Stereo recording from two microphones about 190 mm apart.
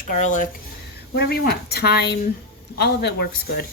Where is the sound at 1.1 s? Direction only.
60° left (ahead or behind).